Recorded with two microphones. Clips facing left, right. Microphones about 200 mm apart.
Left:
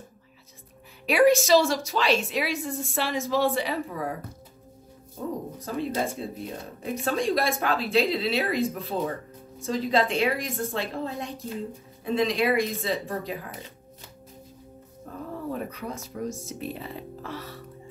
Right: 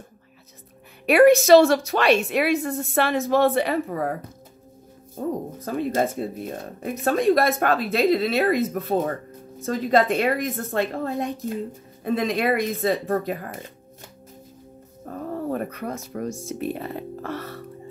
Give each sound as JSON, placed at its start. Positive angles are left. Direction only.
{"t": 1.0, "sound": "a woman's voice", "side_deg": -60}
{"t": 5.7, "sound": "speech", "side_deg": -55}
{"t": 15.0, "sound": "speech", "side_deg": -55}